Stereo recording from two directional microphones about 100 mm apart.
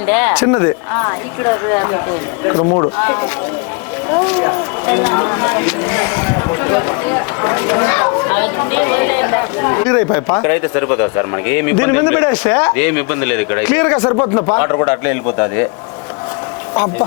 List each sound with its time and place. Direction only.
0.1 s speech: 20° left (ahead or behind)
3.0 s speech: 20° left (ahead or behind)
14.1 s speech: 35° left (ahead or behind)
16.7 s speech: 20° left (ahead or behind)